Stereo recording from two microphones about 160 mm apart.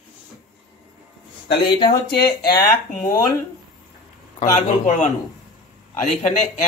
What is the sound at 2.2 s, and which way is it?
Speech, 70° left (ahead or behind).